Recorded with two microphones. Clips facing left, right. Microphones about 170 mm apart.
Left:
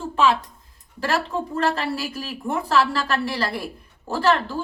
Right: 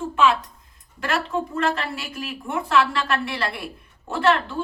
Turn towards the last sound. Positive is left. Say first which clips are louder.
# even
turn(degrees=35)  # may be behind; listen again after turning